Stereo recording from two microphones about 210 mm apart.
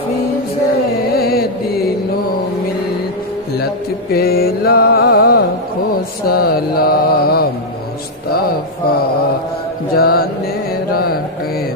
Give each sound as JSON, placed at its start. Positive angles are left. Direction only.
{"t": 1.1, "sound": "music", "side_deg": 45}
{"t": 4.1, "sound": "mantra", "side_deg": 45}
{"t": 9.9, "sound": "mantra", "side_deg": 45}